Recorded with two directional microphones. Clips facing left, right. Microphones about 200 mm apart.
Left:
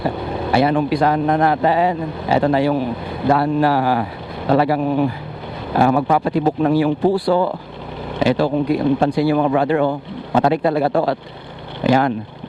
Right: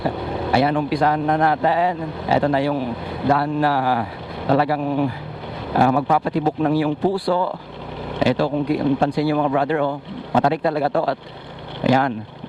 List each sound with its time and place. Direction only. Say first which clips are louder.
0.5 s a man's voice: left 3 dB; 15° left (ahead or behind)